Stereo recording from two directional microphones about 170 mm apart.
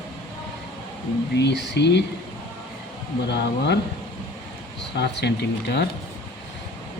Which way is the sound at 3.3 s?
80° left.